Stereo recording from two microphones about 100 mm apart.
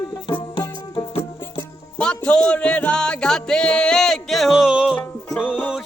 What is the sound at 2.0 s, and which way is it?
Music, 10° left (ahead or behind).